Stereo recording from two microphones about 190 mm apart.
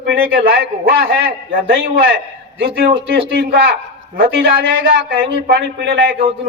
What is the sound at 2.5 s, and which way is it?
A man's voice, 55° right (ahead or behind).